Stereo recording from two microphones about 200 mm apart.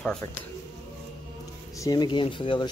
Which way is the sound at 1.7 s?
20° left (ahead or behind).